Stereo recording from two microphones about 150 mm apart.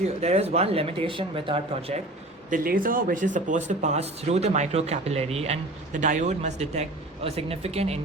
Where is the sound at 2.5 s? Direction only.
65° right (ahead or behind).